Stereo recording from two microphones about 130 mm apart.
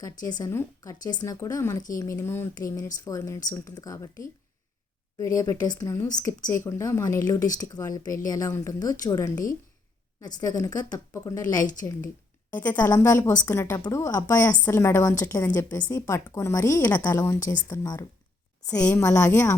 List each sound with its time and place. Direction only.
0.0 s a woman's voice: 30° left (ahead or behind)
12.5 s a woman's voice: 15° left (ahead or behind)
12.9 s a woman's voice: 25° left (ahead or behind)